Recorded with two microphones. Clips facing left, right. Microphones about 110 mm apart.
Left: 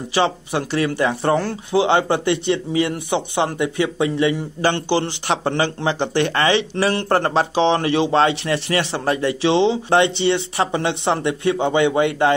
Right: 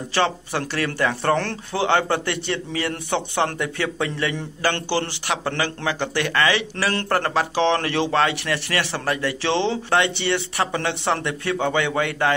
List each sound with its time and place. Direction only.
0.1 s speech: 20° left (ahead or behind)